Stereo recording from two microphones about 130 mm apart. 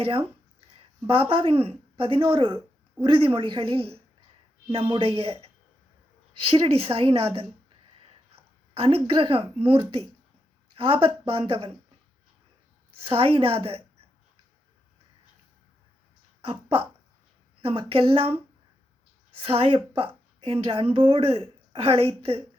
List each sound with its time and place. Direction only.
0.0 s a woman's voice: 45° right (ahead or behind)
8.7 s a woman's voice: 45° right (ahead or behind)
13.0 s a woman's voice: 45° right (ahead or behind)
16.4 s a woman's voice: 45° right (ahead or behind)
19.5 s a woman's voice: 45° right (ahead or behind)